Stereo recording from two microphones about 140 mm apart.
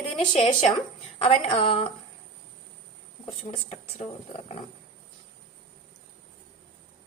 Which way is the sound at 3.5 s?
45° left (ahead or behind).